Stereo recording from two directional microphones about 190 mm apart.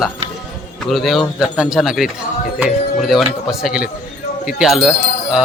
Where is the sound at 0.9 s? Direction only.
Centre (ahead or behind).